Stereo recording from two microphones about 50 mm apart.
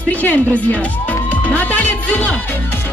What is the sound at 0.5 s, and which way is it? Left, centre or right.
Music, left.